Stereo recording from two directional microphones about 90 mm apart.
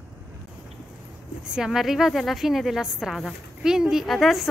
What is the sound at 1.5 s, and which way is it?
A woman's voice, 5° right (ahead or behind).